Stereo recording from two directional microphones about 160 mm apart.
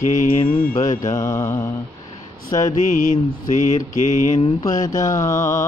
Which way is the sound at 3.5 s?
55° left (ahead or behind).